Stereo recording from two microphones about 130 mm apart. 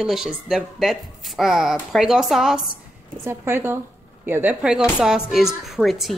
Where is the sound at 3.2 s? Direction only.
20° right (ahead or behind).